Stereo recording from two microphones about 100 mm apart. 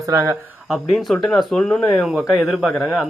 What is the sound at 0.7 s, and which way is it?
Speech, centre (ahead or behind).